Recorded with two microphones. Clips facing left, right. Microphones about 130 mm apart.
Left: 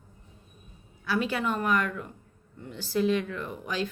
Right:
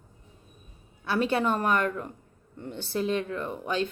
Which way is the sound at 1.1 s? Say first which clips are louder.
Right 3 dB; 35° right (ahead or behind).